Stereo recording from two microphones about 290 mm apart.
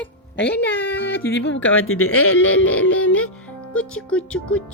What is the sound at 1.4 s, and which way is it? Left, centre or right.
Speech, left.